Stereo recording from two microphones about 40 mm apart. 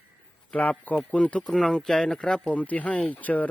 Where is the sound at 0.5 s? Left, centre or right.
Left.